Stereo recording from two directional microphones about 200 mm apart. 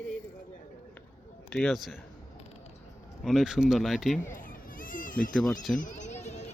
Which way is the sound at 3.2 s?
Centre (ahead or behind).